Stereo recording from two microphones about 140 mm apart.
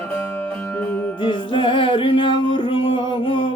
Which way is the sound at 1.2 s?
40° left (ahead or behind).